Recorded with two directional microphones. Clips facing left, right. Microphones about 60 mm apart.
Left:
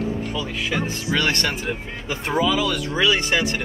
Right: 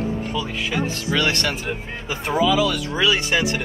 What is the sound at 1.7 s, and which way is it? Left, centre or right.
Speech, centre.